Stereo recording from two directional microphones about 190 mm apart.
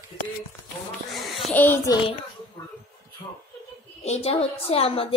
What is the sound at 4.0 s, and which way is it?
A woman's voice, 35° left (ahead or behind).